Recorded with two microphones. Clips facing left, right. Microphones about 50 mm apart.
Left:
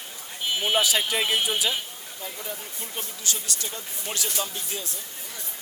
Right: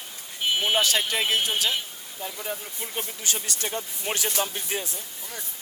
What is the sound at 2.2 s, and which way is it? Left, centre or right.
Speech, right.